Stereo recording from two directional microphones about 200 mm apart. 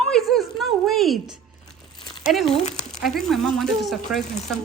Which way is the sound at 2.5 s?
35° left (ahead or behind).